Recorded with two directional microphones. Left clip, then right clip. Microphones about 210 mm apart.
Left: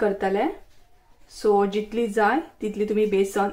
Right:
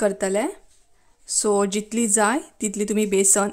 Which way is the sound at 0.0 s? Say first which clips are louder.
Right 1 dB; 65° right (ahead or behind).